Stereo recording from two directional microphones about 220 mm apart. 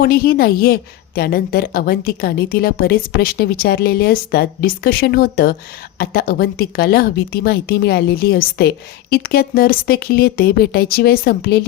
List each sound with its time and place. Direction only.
0.0 s a woman's voice: 45° left (ahead or behind)